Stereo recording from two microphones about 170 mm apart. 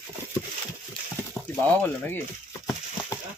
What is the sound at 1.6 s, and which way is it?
Speech, 10° left (ahead or behind).